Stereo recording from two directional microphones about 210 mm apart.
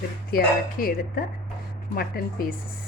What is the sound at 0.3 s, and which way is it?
Speech, 45° left (ahead or behind).